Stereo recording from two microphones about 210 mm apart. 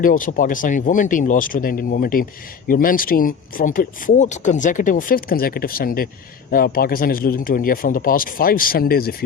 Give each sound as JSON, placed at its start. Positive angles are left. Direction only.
{"t": 0.0, "sound": "a man's voice", "side_deg": 40}